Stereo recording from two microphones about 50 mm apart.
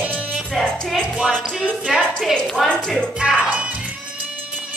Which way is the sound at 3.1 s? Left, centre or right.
Centre.